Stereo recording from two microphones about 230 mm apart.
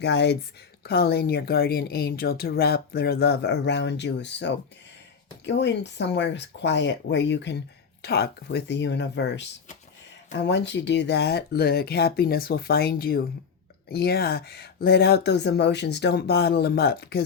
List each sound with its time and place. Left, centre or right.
0.0 s speech: left